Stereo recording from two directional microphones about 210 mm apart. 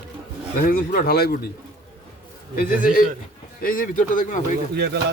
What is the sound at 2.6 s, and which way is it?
Speech, 40° left (ahead or behind).